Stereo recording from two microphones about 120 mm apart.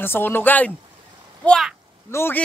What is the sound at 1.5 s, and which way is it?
Speech, centre (ahead or behind).